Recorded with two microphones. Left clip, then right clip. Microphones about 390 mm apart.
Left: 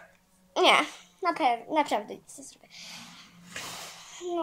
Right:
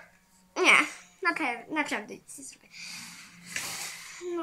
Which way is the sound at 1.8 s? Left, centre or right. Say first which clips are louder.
Left 4 dB; centre.